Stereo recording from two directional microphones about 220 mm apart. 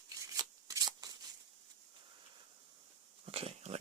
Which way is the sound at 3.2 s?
25° right (ahead or behind).